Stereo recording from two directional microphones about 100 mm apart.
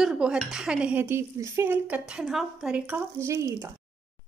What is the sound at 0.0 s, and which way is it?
Speech, 5° right (ahead or behind).